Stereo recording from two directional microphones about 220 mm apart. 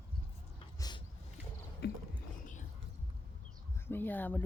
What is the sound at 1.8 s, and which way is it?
Boat, 50° left (ahead or behind).